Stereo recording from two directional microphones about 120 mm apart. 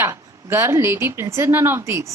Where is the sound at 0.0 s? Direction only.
20° right (ahead or behind).